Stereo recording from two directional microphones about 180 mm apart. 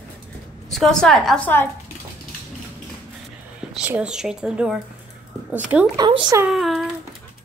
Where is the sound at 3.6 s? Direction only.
5° right (ahead or behind).